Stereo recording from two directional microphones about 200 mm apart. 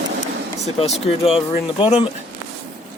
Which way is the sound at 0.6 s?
35° left (ahead or behind).